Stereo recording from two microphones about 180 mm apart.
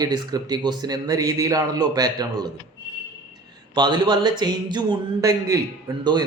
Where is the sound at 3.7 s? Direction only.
25° right (ahead or behind).